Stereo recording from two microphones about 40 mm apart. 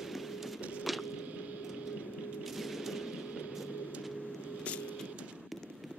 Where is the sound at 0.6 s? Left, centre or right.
Right.